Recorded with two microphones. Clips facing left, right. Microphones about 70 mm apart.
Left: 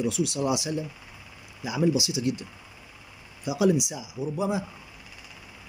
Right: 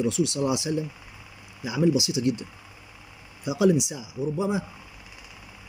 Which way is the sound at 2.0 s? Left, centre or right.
Left.